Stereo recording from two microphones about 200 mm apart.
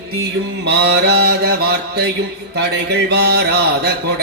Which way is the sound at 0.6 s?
55° right (ahead or behind).